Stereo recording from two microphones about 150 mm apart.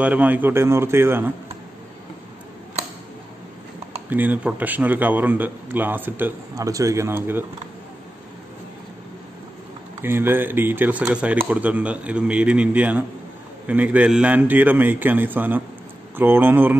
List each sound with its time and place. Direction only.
0.0 s speech: 10° right (ahead or behind)
4.1 s speech: 10° right (ahead or behind)
10.0 s speech: 15° right (ahead or behind)